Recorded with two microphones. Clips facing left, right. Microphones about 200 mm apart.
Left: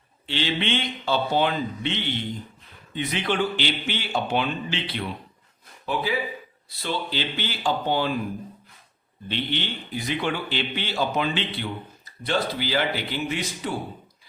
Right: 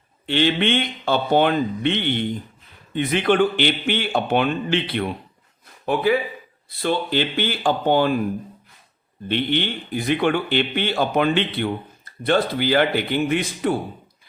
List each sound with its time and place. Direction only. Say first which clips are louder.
0.3 s a man's voice: right 7 dB; 55° right (ahead or behind)
9.3 s a man's voice: right 7 dB; 55° right (ahead or behind)